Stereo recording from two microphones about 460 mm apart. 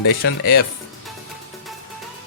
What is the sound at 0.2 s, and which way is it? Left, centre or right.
Speech, left.